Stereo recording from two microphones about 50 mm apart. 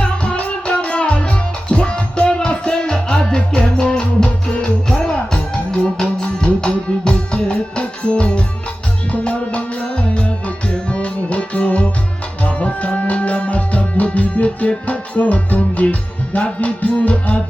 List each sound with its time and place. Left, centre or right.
0.0 s music: left